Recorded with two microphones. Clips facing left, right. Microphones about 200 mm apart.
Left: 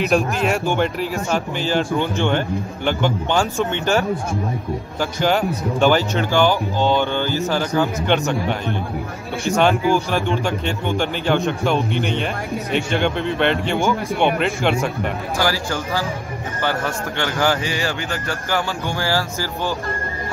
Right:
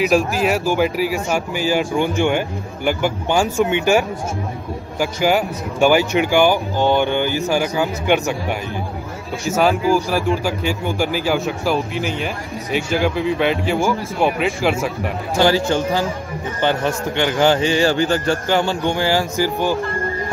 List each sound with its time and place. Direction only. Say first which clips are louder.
0.0 s speech: right 2 dB; centre (ahead or behind)
5.2 s a man's voice: even; 10° right (ahead or behind)
15.3 s a man's voice: right 8 dB; 25° right (ahead or behind)